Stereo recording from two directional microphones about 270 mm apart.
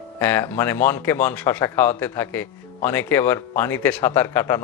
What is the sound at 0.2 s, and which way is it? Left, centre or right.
Speech, centre.